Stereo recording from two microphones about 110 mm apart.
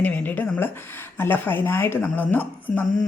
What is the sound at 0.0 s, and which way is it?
A woman's voice, 15° left (ahead or behind).